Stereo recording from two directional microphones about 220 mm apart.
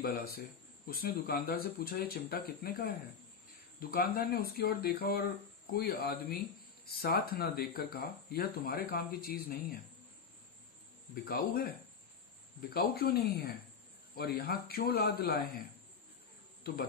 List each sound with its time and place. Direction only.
0.0 s speech: 45° left (ahead or behind)
3.9 s speech: 40° left (ahead or behind)
11.2 s speech: 45° left (ahead or behind)
16.6 s insect: 45° left (ahead or behind)